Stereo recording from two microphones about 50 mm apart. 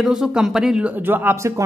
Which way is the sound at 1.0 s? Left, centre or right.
Right.